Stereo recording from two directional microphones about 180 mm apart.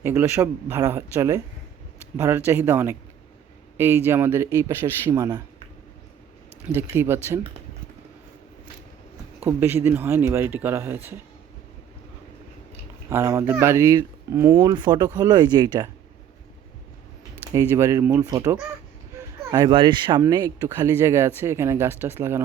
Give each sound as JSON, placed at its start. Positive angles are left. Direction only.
{"t": 0.0, "sound": "speech", "side_deg": -15}
{"t": 6.7, "sound": "speech", "side_deg": -15}
{"t": 9.4, "sound": "speech", "side_deg": -10}
{"t": 13.1, "sound": "speech", "side_deg": -15}
{"t": 14.6, "sound": "speech", "side_deg": -25}
{"t": 17.5, "sound": "speech", "side_deg": -15}